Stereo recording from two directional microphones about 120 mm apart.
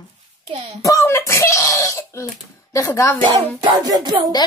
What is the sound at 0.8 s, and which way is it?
A woman's voice, 25° left (ahead or behind).